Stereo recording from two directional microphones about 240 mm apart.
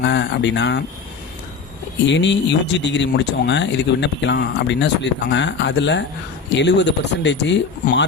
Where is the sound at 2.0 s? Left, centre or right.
Left.